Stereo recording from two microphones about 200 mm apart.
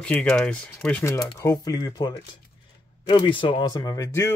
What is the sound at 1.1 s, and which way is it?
Speech, 20° left (ahead or behind).